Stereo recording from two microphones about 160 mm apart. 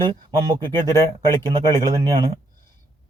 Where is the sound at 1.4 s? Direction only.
30° right (ahead or behind).